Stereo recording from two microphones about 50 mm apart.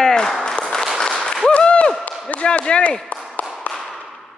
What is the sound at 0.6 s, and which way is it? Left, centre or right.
Applause, centre.